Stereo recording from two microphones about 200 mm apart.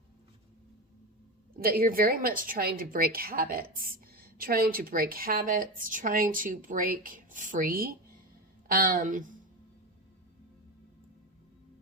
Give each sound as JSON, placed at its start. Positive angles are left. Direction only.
{"t": 1.5, "sound": "a woman's voice", "side_deg": -45}